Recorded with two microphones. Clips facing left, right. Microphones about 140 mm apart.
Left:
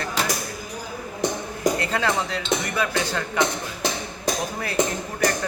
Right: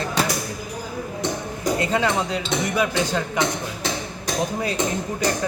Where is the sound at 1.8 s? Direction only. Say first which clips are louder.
Right 3 dB; 20° right (ahead or behind).